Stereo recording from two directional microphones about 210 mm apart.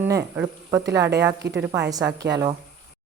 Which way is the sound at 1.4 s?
55° right (ahead or behind).